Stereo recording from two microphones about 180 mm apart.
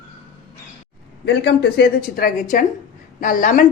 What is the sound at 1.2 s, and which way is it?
A woman's voice, 70° left (ahead or behind).